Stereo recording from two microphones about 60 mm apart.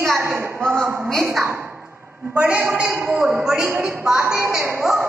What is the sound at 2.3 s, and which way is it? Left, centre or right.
Speech, right.